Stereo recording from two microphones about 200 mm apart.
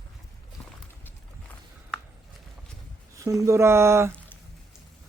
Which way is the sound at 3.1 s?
15° right (ahead or behind).